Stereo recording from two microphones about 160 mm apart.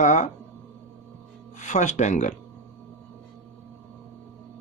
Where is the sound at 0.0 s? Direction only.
50° left (ahead or behind).